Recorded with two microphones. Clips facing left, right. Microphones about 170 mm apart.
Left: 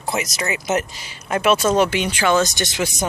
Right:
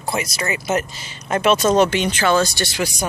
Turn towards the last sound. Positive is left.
turn(degrees=20)  # may be behind; listen again after turning